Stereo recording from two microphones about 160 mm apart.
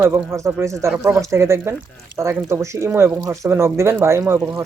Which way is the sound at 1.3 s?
15° right (ahead or behind).